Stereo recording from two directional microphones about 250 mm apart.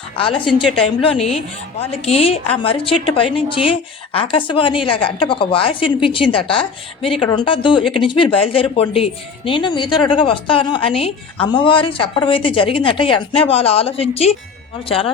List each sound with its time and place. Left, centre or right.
0.2 s speech: left
2.0 s speech: left
7.8 s speech: centre
8.0 s speech: centre